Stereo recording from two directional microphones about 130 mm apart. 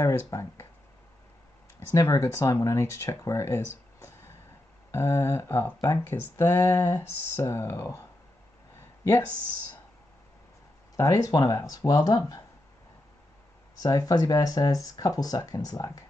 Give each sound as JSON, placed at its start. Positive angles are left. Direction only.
{"t": 0.0, "sound": "speech", "side_deg": 25}
{"t": 2.0, "sound": "speech", "side_deg": 25}
{"t": 11.0, "sound": "speech", "side_deg": 25}
{"t": 13.8, "sound": "speech", "side_deg": 30}